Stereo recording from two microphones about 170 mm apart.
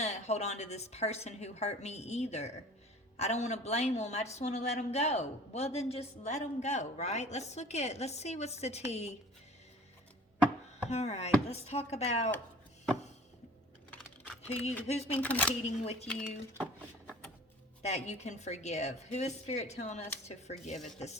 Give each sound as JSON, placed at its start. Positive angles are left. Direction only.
{"t": 0.0, "sound": "a woman's voice", "side_deg": 40}
{"t": 10.8, "sound": "a woman's voice", "side_deg": 40}
{"t": 14.4, "sound": "a woman's voice", "side_deg": 40}
{"t": 15.2, "sound": "speech", "side_deg": 10}
{"t": 15.6, "sound": "a woman's voice", "side_deg": 40}
{"t": 17.8, "sound": "a woman's voice", "side_deg": 40}